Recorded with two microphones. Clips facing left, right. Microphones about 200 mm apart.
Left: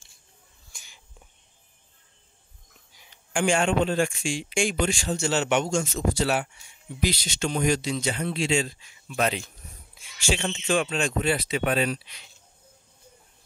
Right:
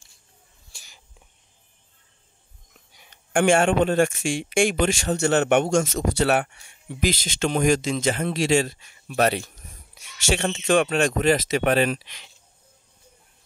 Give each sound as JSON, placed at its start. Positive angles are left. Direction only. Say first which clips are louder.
{"t": 0.7, "sound": "whispering", "louder": "right 1 dB", "side_deg": -30}
{"t": 3.5, "sound": "speech", "louder": "right 2 dB", "side_deg": -50}
{"t": 4.2, "sound": "speech", "louder": "right 5 dB", "side_deg": -80}
{"t": 7.3, "sound": "speech", "louder": "right 5 dB", "side_deg": -55}
{"t": 10.3, "sound": "speech", "louder": "right 5 dB", "side_deg": -80}
{"t": 10.7, "sound": "speech", "louder": "right 5 dB", "side_deg": -55}
{"t": 11.0, "sound": "speech", "louder": "right 5 dB", "side_deg": -80}